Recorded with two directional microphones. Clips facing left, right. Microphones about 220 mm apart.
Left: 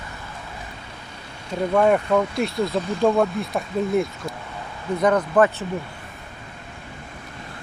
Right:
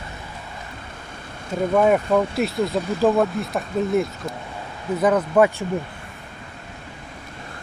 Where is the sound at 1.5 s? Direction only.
5° right (ahead or behind).